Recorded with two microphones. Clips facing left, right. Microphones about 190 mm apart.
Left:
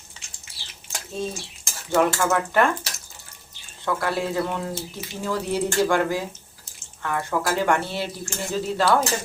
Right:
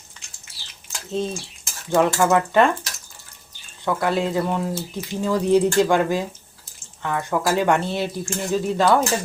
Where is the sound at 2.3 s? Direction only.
20° right (ahead or behind).